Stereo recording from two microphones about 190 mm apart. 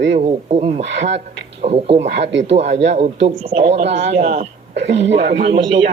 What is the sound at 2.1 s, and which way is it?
Speech, 70° right (ahead or behind).